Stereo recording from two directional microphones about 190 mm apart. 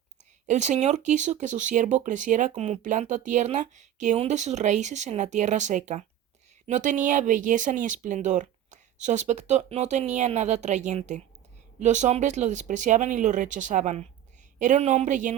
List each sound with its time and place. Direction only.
0.4 s speech: 40° right (ahead or behind)